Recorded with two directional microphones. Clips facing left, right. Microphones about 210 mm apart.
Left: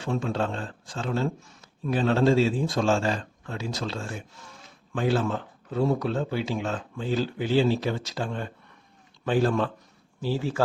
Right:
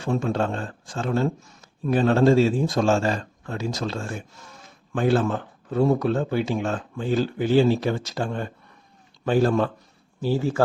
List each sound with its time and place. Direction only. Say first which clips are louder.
0.0 s a man's voice: right 3 dB; 45° right (ahead or behind)